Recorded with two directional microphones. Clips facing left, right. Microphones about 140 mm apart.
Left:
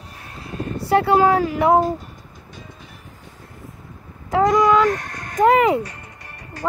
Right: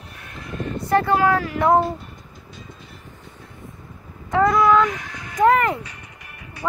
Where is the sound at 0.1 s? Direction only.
35° left (ahead or behind).